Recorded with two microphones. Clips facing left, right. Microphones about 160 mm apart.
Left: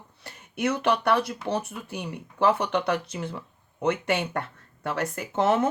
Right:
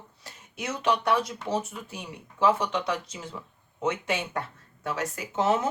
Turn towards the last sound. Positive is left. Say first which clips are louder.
# left 3 dB
turn(degrees=60)  # may be behind; listen again after turning